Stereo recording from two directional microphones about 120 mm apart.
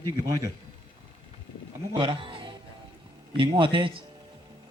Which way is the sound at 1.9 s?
45° right (ahead or behind).